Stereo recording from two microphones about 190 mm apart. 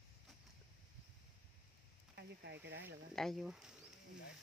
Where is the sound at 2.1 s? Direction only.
65° right (ahead or behind).